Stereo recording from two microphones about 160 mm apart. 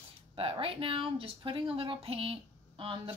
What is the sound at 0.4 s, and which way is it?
A woman's voice, 35° right (ahead or behind).